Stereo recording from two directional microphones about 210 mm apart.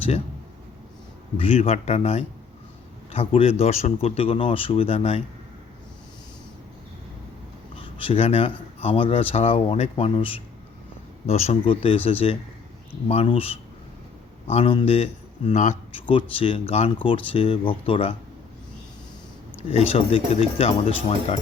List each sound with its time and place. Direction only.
1.4 s speech: 30° left (ahead or behind)
7.8 s speech: 25° left (ahead or behind)
19.5 s speech: 30° left (ahead or behind)